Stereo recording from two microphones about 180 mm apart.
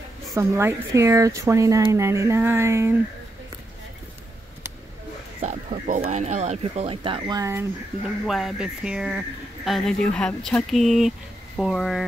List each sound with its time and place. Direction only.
0.4 s speech: 15° right (ahead or behind)
5.4 s speech: 45° right (ahead or behind); by 7.6 s 20° right (ahead or behind)
8.3 s speech: centre (ahead or behind)